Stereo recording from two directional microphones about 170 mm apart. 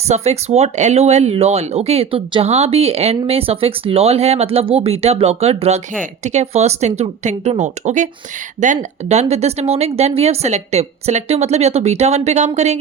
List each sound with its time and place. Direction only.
0.1 s speech: 40° right (ahead or behind)